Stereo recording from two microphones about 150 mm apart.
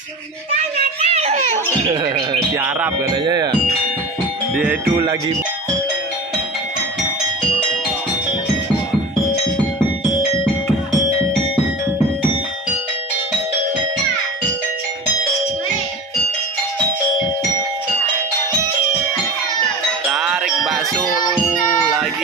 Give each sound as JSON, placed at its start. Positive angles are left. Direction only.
{"t": 0.6, "sound": "a child's voice", "side_deg": -45}
{"t": 1.9, "sound": "music", "side_deg": -30}
{"t": 20.1, "sound": "music", "side_deg": 0}